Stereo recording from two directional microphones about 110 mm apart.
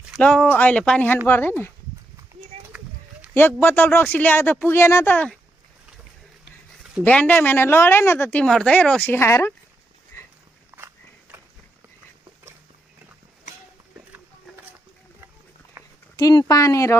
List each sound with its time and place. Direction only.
0.2 s a woman's voice: 10° left (ahead or behind)
3.3 s speech: 20° left (ahead or behind)
7.0 s a woman's voice: 15° left (ahead or behind)
10.1 s a sound: 25° left (ahead or behind)
10.7 s walk: 20° right (ahead or behind)
15.8 s a sound: 25° right (ahead or behind)
16.1 s speech: 35° left (ahead or behind)